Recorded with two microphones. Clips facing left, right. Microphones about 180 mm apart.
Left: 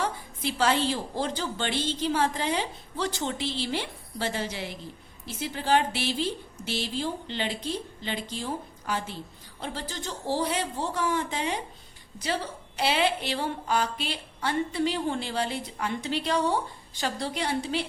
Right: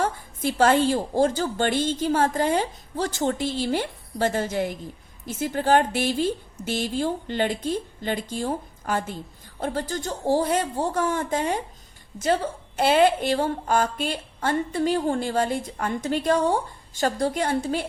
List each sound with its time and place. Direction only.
0.0 s a woman's voice: 50° right (ahead or behind)